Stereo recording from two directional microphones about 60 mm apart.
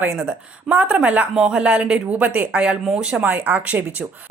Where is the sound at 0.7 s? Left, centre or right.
Right.